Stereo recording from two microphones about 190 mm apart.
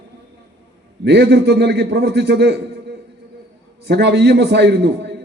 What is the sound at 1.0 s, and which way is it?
A man's voice, 65° right (ahead or behind).